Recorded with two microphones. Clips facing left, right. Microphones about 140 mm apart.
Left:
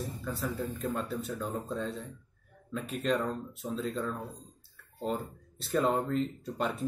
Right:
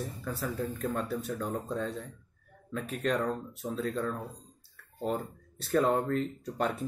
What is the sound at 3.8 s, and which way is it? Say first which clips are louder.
Speech: right 2 dB; centre (ahead or behind).